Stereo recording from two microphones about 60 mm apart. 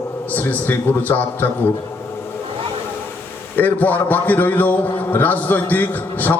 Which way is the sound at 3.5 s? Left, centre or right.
Left.